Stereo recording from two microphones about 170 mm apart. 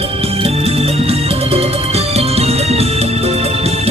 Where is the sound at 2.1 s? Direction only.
35° right (ahead or behind).